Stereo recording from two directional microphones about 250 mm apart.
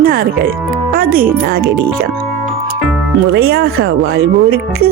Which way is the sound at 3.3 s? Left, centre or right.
Right.